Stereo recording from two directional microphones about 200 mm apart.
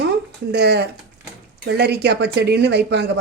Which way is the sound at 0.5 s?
55° right (ahead or behind).